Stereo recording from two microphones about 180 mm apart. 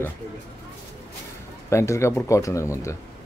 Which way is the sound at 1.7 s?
15° left (ahead or behind).